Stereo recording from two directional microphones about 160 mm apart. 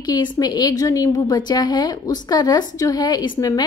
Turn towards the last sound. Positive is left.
turn(degrees=25)  # may be behind; listen again after turning